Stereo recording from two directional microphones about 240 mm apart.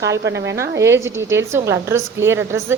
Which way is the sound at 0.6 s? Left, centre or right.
Centre.